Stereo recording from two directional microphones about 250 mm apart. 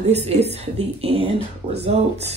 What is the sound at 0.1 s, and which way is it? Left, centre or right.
A woman's voice, right.